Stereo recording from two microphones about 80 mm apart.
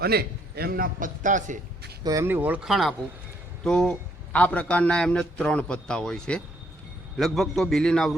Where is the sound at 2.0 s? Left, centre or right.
Right.